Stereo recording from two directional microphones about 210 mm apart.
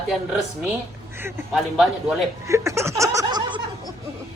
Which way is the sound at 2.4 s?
15° right (ahead or behind).